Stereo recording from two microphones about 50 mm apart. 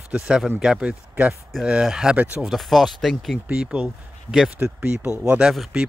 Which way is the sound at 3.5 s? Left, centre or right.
Right.